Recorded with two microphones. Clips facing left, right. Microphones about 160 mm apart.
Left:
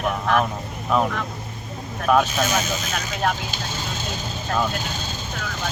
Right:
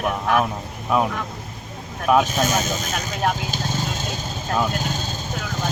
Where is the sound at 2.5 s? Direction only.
45° right (ahead or behind).